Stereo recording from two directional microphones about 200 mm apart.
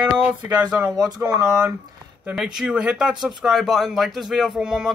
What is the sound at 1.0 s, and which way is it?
Speech, 20° right (ahead or behind).